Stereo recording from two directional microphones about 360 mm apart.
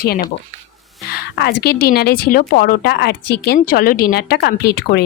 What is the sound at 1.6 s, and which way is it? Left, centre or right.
Speech, left.